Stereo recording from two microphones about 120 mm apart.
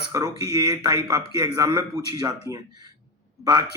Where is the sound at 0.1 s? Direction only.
30° right (ahead or behind).